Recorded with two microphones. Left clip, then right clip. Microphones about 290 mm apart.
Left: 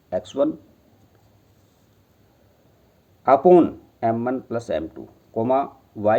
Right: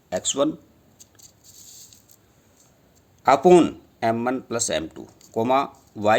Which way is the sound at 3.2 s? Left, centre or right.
Right.